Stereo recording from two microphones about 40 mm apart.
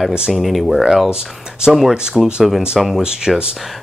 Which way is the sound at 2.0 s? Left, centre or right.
Centre.